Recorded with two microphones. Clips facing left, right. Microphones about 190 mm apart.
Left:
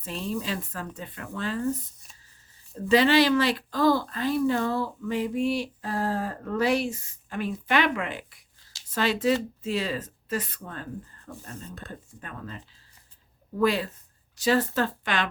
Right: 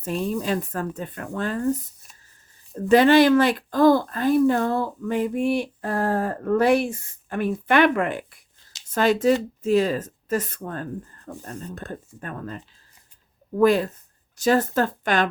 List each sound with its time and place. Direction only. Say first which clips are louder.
0.0 s speech: right 6 dB; 50° right (ahead or behind)
2.7 s speech: right 5 dB; 50° right (ahead or behind)